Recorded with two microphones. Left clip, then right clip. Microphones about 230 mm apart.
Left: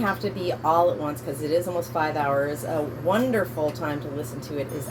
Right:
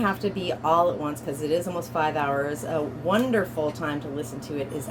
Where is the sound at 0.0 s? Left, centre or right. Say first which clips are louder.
Even; right.